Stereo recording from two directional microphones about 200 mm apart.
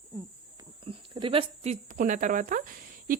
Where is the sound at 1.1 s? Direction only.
25° right (ahead or behind).